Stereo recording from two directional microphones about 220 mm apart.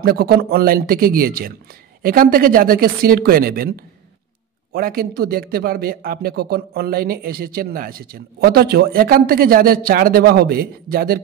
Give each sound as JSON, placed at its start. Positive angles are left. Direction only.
{"t": 0.0, "sound": "a man's voice", "side_deg": -45}
{"t": 4.7, "sound": "a man's voice", "side_deg": -45}